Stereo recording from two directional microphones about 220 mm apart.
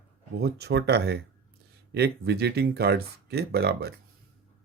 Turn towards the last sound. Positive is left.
turn(degrees=-45)  # may be behind; listen again after turning